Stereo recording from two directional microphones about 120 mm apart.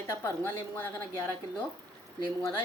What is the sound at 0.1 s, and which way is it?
Speech, 20° left (ahead or behind).